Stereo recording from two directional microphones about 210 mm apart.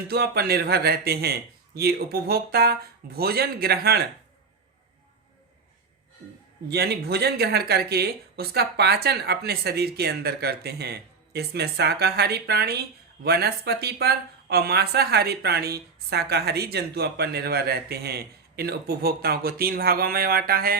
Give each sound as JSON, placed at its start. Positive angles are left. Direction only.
{"t": 0.1, "sound": "speech", "side_deg": -50}
{"t": 6.7, "sound": "speech", "side_deg": -50}